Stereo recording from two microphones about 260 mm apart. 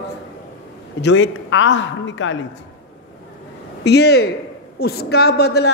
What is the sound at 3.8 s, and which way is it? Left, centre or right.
A man's voice, left.